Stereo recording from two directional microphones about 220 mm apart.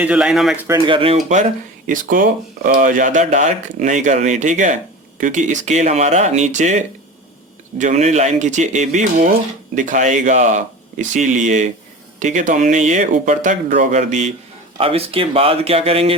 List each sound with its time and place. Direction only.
0.0 s speech: 5° right (ahead or behind)
0.7 s speech: 25° right (ahead or behind)